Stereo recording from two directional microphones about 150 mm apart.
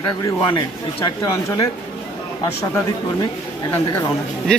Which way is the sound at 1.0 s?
20° left (ahead or behind).